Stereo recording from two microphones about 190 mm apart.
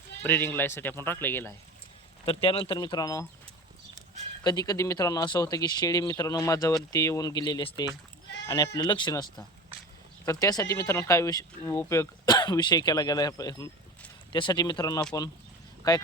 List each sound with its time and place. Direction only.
0.2 s speech: 10° left (ahead or behind)
2.2 s speech: 30° left (ahead or behind)
4.4 s speech: 20° left (ahead or behind)